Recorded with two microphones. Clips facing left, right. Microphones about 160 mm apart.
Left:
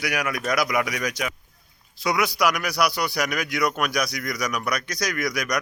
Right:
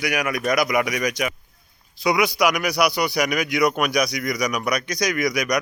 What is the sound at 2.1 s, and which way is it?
A man's voice, centre (ahead or behind).